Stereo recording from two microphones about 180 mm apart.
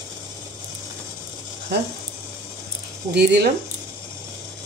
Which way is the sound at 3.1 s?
65° right (ahead or behind).